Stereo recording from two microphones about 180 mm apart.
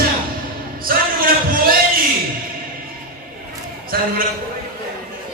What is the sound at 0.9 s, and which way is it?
Music, 55° right (ahead or behind).